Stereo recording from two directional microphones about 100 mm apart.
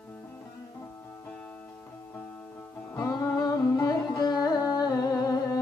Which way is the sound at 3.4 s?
40° left (ahead or behind).